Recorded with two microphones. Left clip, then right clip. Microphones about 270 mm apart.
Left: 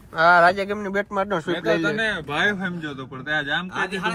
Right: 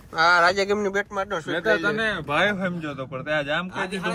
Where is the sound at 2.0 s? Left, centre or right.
Right.